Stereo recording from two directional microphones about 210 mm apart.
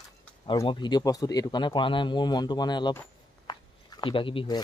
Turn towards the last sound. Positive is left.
turn(degrees=20)  # may be behind; listen again after turning